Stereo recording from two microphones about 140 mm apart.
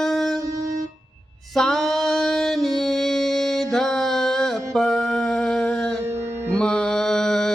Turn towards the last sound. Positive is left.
turn(degrees=5)  # may be behind; listen again after turning